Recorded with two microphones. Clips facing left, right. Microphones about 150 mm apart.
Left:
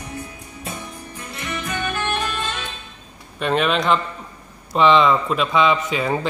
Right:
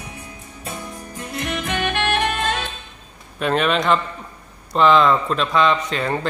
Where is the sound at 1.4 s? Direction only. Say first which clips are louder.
Right 2 dB; 70° right (ahead or behind).